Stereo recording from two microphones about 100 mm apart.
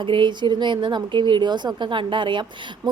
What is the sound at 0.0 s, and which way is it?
A woman's voice, 55° right (ahead or behind).